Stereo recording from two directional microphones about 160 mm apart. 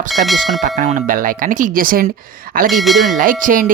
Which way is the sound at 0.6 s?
50° right (ahead or behind).